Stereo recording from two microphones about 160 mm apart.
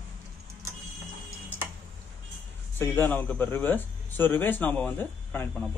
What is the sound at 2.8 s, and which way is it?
Speech, 10° left (ahead or behind).